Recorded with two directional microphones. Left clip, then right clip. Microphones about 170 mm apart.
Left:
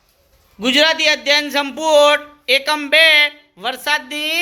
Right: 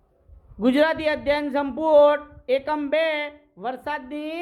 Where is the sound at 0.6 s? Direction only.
10° right (ahead or behind).